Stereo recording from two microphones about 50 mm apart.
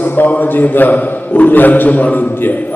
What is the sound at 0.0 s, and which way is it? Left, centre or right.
A man's voice, left.